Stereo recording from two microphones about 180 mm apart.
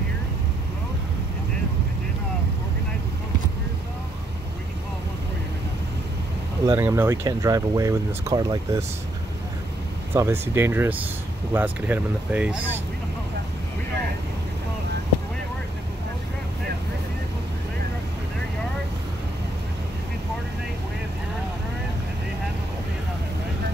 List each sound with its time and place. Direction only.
6.6 s speech: 15° right (ahead or behind)
10.1 s speech: 15° right (ahead or behind)